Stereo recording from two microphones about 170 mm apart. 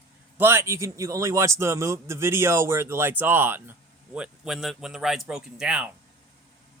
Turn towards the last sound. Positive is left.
turn(degrees=-5)  # may be behind; listen again after turning